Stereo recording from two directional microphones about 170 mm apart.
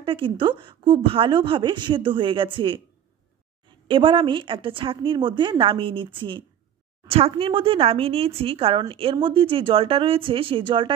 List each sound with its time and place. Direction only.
0.0 s a woman's voice: 30° right (ahead or behind)
3.8 s a woman's voice: 30° right (ahead or behind)